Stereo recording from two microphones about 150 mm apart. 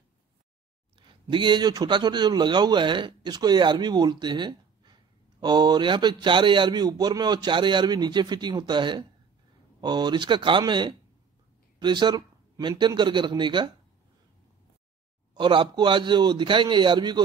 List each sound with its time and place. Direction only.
0.9 s a man's voice: 30° right (ahead or behind)
15.3 s a man's voice: 35° right (ahead or behind)